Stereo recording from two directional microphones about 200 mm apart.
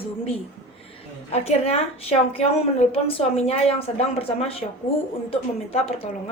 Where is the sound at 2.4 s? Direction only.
30° left (ahead or behind).